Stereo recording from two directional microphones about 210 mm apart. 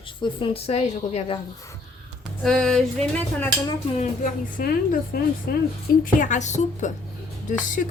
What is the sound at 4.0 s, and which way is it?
A woman's voice, 40° left (ahead or behind).